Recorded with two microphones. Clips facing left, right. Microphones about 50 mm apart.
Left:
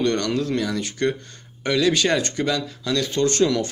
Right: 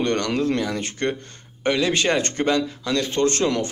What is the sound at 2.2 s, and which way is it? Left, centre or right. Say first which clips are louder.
Speech: right 2 dB; right.